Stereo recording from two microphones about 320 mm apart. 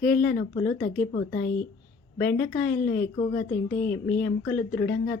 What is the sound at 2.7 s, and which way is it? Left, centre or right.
A woman's voice, left.